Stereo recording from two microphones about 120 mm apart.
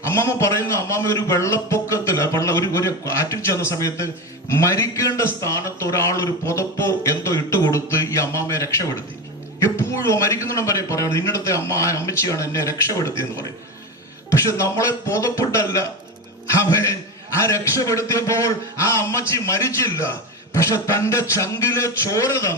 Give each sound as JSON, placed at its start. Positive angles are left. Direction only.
{"t": 0.1, "sound": "a man's voice", "side_deg": 25}